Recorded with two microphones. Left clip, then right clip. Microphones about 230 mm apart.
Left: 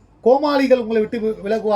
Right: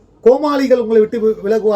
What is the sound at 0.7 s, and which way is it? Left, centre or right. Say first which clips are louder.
Speech: right 3 dB; right.